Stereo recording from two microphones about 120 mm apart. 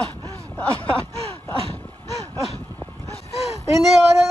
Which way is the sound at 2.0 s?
30° right (ahead or behind).